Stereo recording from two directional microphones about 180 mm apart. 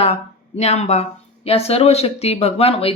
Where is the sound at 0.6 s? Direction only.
35° left (ahead or behind).